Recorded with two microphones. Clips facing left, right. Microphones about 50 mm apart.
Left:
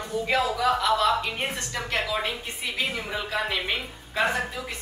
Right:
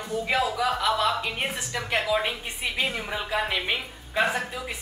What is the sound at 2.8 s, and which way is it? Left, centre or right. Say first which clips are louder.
A woman's voice: even; centre.